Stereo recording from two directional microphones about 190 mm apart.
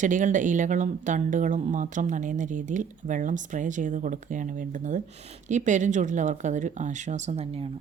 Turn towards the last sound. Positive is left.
turn(degrees=-35)  # may be behind; listen again after turning